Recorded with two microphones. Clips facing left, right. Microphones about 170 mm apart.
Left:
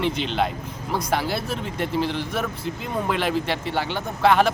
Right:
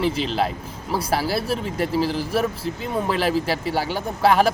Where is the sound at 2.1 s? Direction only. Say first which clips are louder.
Right 4 dB; 35° right (ahead or behind).